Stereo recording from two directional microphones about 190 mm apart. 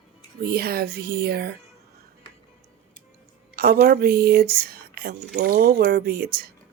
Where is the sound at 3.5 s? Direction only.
50° right (ahead or behind).